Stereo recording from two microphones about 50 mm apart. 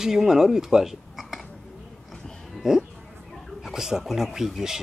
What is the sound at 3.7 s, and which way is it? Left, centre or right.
Speech, centre.